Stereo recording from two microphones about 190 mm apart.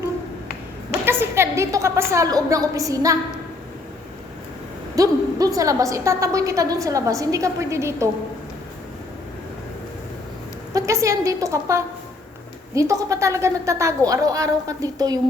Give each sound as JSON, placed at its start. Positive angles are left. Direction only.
{"t": 1.0, "sound": "a woman's voice", "side_deg": -10}
{"t": 4.9, "sound": "a woman's voice", "side_deg": -20}
{"t": 10.8, "sound": "a woman's voice", "side_deg": -15}